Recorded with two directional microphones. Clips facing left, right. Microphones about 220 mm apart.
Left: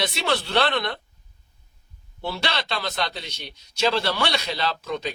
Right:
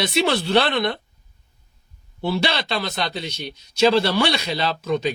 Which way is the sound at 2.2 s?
15° right (ahead or behind).